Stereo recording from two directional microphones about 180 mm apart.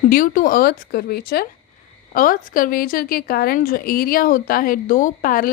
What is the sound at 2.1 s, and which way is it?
A woman's voice, 50° left (ahead or behind).